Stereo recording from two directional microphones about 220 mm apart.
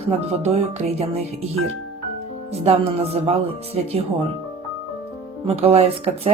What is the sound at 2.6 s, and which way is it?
Speech, 25° right (ahead or behind).